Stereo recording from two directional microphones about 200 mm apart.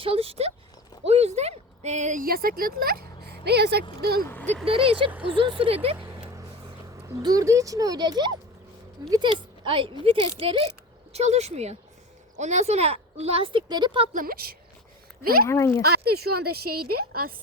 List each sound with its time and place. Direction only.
0.0 s speech: 30° right (ahead or behind)
1.0 s a sound: 30° right (ahead or behind); by 3.8 s 55° right (ahead or behind)
4.0 s a woman's voice: 50° right (ahead or behind)
4.6 s speech: 25° right (ahead or behind)
6.3 s a woman's voice: 15° right (ahead or behind)
14.1 s a woman's voice: 45° right (ahead or behind)
15.4 s speech: 15° left (ahead or behind)
15.8 s a woman's voice: 50° right (ahead or behind)